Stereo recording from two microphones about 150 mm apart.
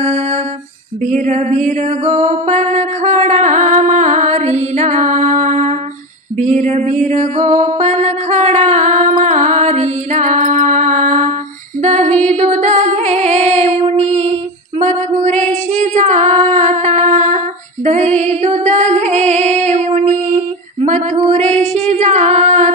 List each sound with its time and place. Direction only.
0.0 s music: 45° right (ahead or behind)
7.6 s mantra: 50° right (ahead or behind)
11.8 s music: 50° right (ahead or behind)
17.8 s female singing: 50° right (ahead or behind)